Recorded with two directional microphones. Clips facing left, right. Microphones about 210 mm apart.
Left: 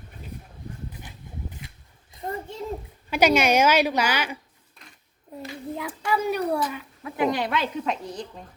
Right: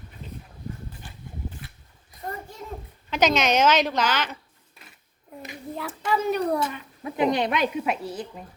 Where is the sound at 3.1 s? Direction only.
10° left (ahead or behind).